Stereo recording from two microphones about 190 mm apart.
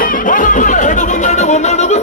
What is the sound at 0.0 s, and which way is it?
Music, 45° left (ahead or behind).